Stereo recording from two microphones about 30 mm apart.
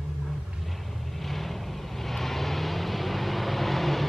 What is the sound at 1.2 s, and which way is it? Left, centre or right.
Vehicle, centre.